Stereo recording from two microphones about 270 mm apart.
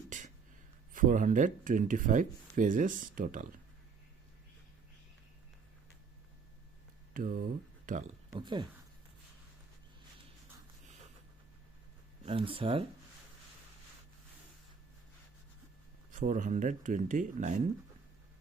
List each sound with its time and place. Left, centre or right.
0.1 s a sound: right
0.9 s speech: right
7.1 s speech: right
8.3 s speech: centre
12.2 s speech: right
16.1 s speech: right